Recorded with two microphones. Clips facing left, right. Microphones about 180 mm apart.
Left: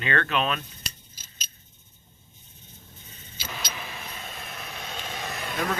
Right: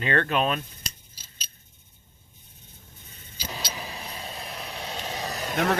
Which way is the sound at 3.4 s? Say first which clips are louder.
Right 2 dB; 35° right (ahead or behind).